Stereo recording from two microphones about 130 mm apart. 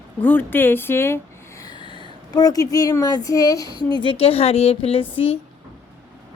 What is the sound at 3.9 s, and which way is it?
A woman's voice, 40° left (ahead or behind).